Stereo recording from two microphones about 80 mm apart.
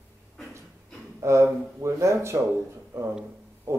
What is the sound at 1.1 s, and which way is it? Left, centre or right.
Speech, right.